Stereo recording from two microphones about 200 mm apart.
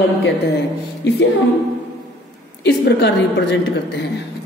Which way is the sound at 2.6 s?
55° left (ahead or behind).